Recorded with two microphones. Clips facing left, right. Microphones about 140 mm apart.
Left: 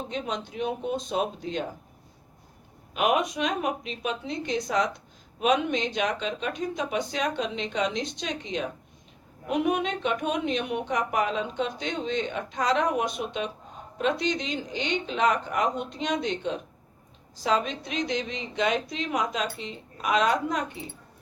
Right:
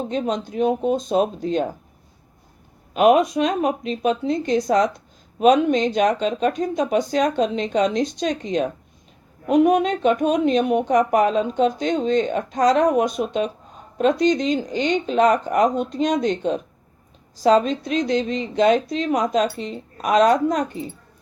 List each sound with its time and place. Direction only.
0.1 s a woman's voice: 40° right (ahead or behind)
2.9 s a woman's voice: 35° right (ahead or behind)